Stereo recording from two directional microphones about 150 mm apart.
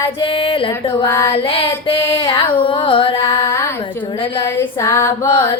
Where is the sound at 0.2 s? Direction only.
35° left (ahead or behind).